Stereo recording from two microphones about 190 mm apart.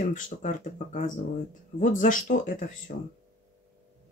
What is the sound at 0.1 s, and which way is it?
Speech, 40° left (ahead or behind).